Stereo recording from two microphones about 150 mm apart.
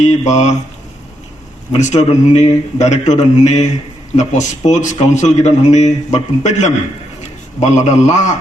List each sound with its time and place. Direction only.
0.0 s speech: 50° left (ahead or behind)
1.7 s speech: 45° left (ahead or behind)